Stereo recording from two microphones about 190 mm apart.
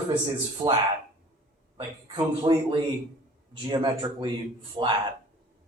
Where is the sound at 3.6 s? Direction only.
25° right (ahead or behind).